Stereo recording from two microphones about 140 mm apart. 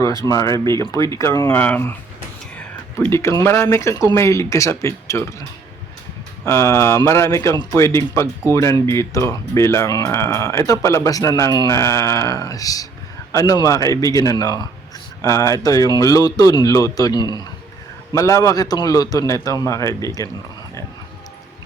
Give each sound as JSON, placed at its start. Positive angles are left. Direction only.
{"t": 0.0, "sound": "speech", "side_deg": 25}
{"t": 2.6, "sound": "a sound", "side_deg": 15}
{"t": 3.4, "sound": "speech", "side_deg": 20}
{"t": 6.4, "sound": "speech", "side_deg": 20}